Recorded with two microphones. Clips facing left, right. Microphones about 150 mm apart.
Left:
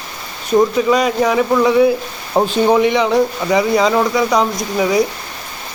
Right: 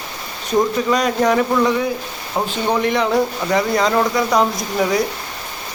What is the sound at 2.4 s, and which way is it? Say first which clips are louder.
Speech: left 7 dB; 30° left (ahead or behind).